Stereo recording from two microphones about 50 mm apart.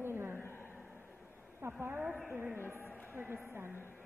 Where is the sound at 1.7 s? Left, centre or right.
Right.